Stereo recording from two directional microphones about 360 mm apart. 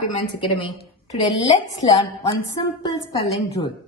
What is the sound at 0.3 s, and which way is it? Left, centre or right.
A woman's voice, centre.